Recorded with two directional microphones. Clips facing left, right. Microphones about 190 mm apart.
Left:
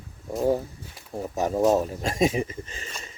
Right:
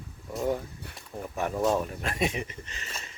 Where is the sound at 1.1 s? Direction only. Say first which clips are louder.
Left 6 dB; 25° left (ahead or behind).